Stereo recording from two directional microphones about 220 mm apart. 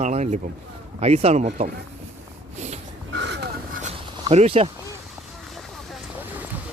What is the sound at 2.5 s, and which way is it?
Snort, 30° right (ahead or behind).